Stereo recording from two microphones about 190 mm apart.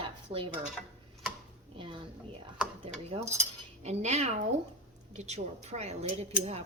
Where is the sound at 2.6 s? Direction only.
5° right (ahead or behind).